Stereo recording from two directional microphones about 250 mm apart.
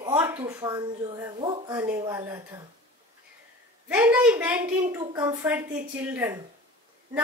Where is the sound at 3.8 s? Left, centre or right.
Centre.